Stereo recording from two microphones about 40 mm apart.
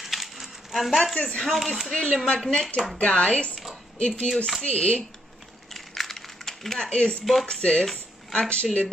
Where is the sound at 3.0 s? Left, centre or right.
Left.